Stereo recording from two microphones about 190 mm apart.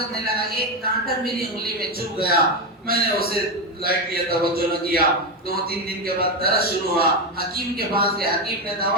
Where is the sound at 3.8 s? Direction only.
50° right (ahead or behind).